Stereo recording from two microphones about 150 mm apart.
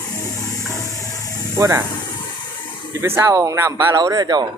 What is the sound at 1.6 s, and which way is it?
Speech, 20° right (ahead or behind).